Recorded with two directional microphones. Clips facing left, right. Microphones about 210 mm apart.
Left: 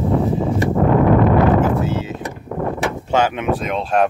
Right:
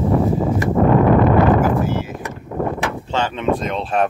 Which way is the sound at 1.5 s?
20° left (ahead or behind).